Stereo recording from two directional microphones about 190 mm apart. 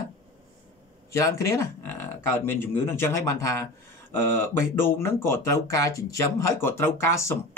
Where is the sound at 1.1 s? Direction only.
15° left (ahead or behind).